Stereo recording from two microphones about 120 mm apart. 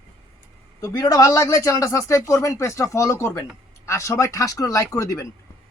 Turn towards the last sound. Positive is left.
turn(degrees=25)  # may be behind; listen again after turning